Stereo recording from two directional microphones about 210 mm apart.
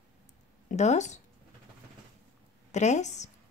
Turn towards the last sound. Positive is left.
turn(degrees=35)  # may be behind; listen again after turning